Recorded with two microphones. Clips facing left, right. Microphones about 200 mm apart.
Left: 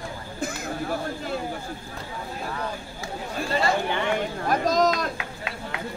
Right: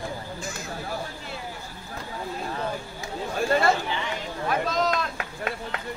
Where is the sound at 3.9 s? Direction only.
55° left (ahead or behind).